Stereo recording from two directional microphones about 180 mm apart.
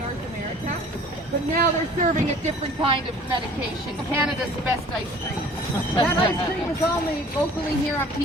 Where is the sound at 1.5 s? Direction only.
40° right (ahead or behind).